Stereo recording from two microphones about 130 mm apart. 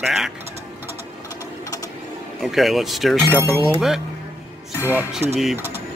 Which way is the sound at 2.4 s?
Centre (ahead or behind).